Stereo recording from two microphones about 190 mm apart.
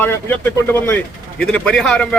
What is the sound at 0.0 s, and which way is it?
A man's voice, 10° left (ahead or behind).